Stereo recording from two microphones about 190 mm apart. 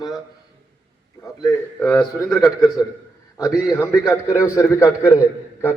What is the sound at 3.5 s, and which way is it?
Speech, 5° right (ahead or behind).